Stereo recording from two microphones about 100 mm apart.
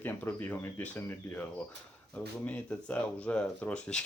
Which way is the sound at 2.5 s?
15° left (ahead or behind).